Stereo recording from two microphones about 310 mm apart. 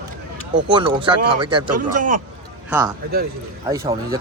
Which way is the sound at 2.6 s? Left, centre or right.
Centre.